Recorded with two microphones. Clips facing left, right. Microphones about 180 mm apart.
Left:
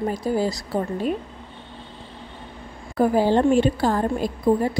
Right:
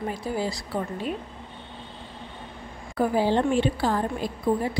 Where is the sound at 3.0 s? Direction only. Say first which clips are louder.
Left 4 dB; 45° left (ahead or behind).